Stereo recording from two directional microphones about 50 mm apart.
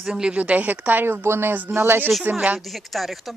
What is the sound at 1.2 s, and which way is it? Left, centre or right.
Speech, right.